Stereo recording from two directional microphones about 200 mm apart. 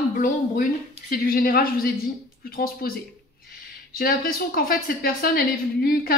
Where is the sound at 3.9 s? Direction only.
45° left (ahead or behind).